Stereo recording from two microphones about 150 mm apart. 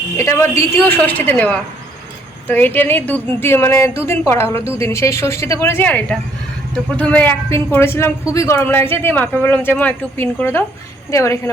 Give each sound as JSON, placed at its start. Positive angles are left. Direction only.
{"t": 0.2, "sound": "speech", "side_deg": 15}